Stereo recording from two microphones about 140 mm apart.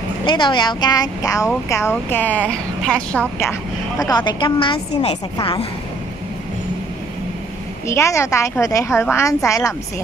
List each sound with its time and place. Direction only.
0.2 s a woman's voice: 35° left (ahead or behind); by 3.4 s 10° left (ahead or behind)
4.0 s a woman's voice: 30° left (ahead or behind)
7.9 s a woman's voice: 20° left (ahead or behind)